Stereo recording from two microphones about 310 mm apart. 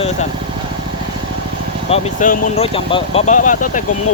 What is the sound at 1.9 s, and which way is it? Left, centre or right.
Speech, left.